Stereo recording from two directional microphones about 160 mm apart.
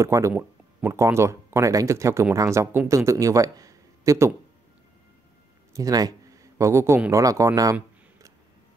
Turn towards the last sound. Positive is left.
turn(degrees=-20)  # may be behind; listen again after turning